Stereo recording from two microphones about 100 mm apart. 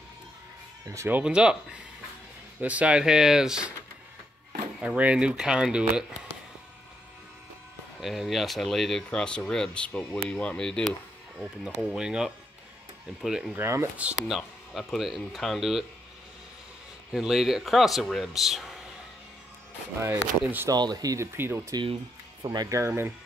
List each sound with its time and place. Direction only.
0.8 s speech: 20° right (ahead or behind)
1.2 s speech: 10° right (ahead or behind)
4.7 s speech: 10° right (ahead or behind)
8.0 s speech: centre (ahead or behind)
11.3 s speech: 5° right (ahead or behind)
13.6 s speech: 25° right (ahead or behind)
13.9 s speech: 10° right (ahead or behind)
17.1 s speech: 5° right (ahead or behind)
20.4 s speech: 20° right (ahead or behind)
20.7 s speech: 45° right (ahead or behind)
21.4 s speech: 25° right (ahead or behind)
22.4 s speech: 45° right (ahead or behind); by 23.1 s 25° right (ahead or behind)